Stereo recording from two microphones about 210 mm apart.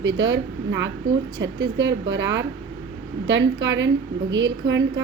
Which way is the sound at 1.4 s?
60° right (ahead or behind).